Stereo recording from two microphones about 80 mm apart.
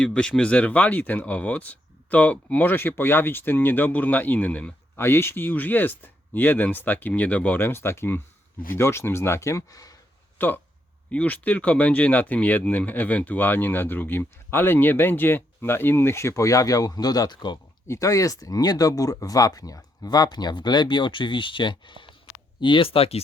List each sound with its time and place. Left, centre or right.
0.0 s speech: centre
4.9 s speech: left
10.3 s speech: left
17.8 s speech: left